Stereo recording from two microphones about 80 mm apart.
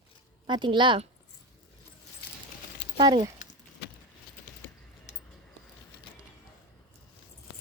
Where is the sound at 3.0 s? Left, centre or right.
Right.